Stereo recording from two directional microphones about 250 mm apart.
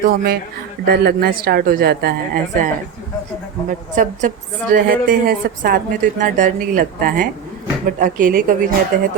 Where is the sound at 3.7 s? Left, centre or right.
Right.